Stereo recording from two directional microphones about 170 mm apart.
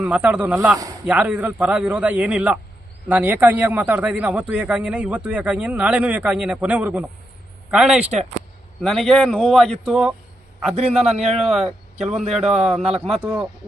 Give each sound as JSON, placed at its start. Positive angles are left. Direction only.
{"t": 0.0, "sound": "a man's voice", "side_deg": -10}
{"t": 10.8, "sound": "a man's voice", "side_deg": -40}
{"t": 12.3, "sound": "a man's voice", "side_deg": 0}
{"t": 12.8, "sound": "a man's voice", "side_deg": -35}